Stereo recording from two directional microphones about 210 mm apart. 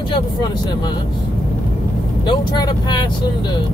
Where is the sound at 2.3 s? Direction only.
20° left (ahead or behind).